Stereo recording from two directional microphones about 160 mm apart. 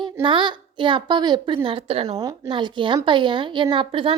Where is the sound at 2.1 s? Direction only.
20° right (ahead or behind).